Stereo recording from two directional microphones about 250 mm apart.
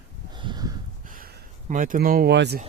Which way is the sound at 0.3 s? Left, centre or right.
Centre.